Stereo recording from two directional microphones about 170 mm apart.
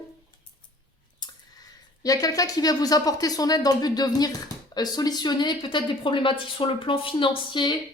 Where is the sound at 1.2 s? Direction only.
25° left (ahead or behind).